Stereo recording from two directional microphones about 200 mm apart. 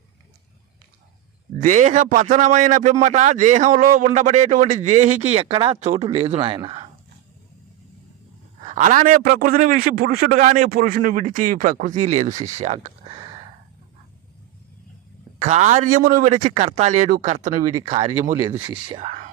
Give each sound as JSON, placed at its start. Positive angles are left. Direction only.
{"t": 1.5, "sound": "a man's voice", "side_deg": -40}
{"t": 8.6, "sound": "a man's voice", "side_deg": -40}
{"t": 13.1, "sound": "a sound", "side_deg": -25}
{"t": 15.4, "sound": "a man's voice", "side_deg": -35}